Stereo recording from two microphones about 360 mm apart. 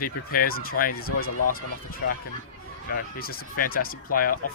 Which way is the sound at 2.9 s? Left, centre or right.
Left.